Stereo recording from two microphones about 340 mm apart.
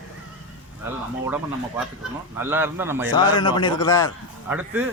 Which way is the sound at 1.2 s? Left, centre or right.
Centre.